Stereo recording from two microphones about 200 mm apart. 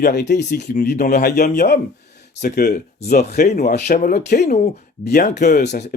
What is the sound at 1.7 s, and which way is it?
Speech, 50° left (ahead or behind).